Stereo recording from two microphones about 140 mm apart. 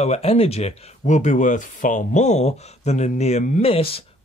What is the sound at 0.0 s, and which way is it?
Speech, 50° left (ahead or behind).